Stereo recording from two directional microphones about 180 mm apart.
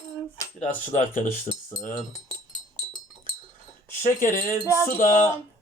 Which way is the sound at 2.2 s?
25° right (ahead or behind).